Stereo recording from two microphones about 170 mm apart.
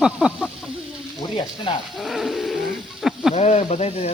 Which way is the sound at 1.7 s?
30° left (ahead or behind).